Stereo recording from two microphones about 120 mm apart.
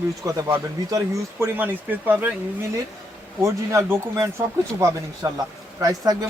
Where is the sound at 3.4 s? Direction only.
25° right (ahead or behind).